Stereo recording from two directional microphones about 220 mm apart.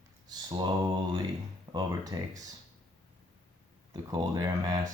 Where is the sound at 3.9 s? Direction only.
15° right (ahead or behind).